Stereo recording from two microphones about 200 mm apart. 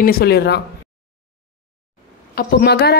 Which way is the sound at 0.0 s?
50° left (ahead or behind).